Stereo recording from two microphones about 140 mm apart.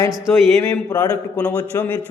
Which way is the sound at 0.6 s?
25° left (ahead or behind).